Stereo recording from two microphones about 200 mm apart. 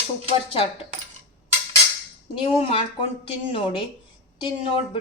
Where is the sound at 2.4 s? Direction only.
30° left (ahead or behind).